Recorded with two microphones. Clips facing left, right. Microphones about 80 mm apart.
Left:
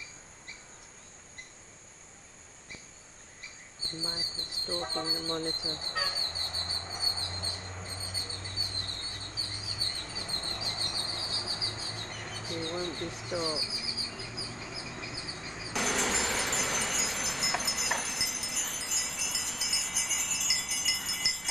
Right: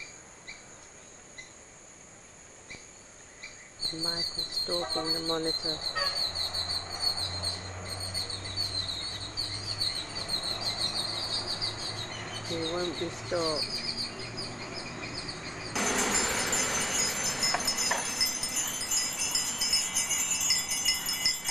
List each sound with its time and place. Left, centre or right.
4.8 s speech: centre
5.8 s fowl: centre
7.5 s a sound: centre
10.6 s a sound: centre
12.8 s speech: centre
13.3 s bird: right
13.6 s insect: centre
14.1 s bird: centre
14.7 s a sound: centre